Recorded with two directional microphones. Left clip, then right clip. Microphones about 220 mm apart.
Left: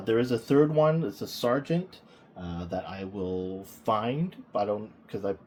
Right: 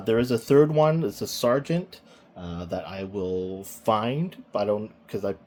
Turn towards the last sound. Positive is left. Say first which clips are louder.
# right 2 dB
turn(degrees=-45)  # may be behind; listen again after turning